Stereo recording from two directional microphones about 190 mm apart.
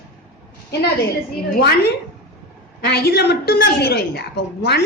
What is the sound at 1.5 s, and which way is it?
A woman's voice, 55° left (ahead or behind).